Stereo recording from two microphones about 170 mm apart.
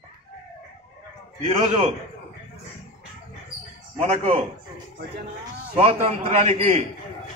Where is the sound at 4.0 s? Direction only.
40° right (ahead or behind).